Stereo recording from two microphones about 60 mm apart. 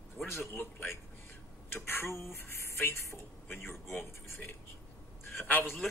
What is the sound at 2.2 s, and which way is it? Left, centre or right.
Music, left.